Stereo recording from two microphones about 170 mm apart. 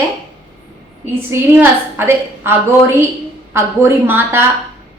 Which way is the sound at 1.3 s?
15° right (ahead or behind).